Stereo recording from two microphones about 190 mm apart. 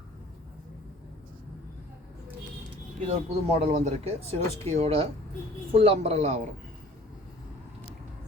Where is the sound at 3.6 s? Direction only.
35° right (ahead or behind).